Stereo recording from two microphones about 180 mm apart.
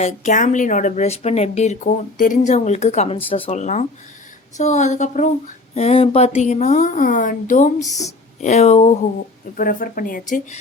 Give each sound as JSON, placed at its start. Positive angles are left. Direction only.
{"t": 0.0, "sound": "speech", "side_deg": 45}
{"t": 9.6, "sound": "a woman's voice", "side_deg": 50}